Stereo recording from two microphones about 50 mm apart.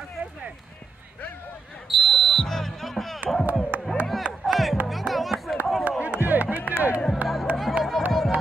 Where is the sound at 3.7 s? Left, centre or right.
Right.